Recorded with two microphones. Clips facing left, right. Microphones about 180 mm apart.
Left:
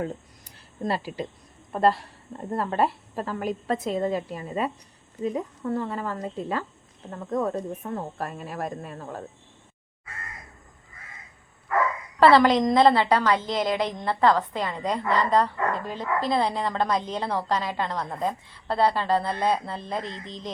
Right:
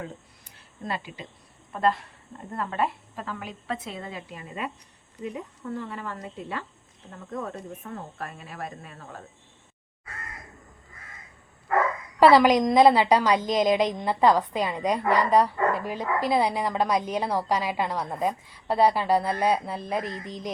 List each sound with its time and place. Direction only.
0.9 s a woman's voice: 35° left (ahead or behind)
12.2 s a woman's voice: 10° right (ahead or behind)